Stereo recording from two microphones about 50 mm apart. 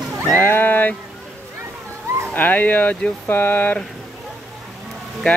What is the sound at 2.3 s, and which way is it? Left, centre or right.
Speech, left.